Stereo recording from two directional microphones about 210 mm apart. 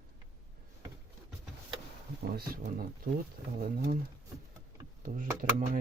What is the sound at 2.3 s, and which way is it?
Speech, 45° right (ahead or behind).